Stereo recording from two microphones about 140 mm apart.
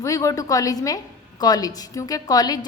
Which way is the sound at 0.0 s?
20° left (ahead or behind).